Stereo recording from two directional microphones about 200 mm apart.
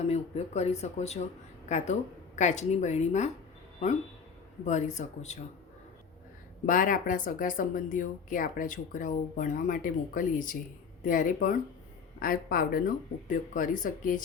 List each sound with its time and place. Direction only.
0.0 s speech: 30° left (ahead or behind)
6.7 s speech: 45° left (ahead or behind)